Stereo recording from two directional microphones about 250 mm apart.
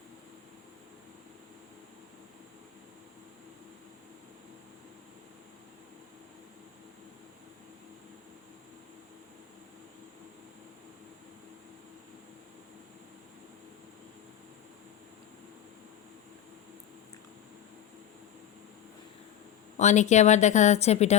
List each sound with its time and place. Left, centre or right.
19.7 s a woman's voice: left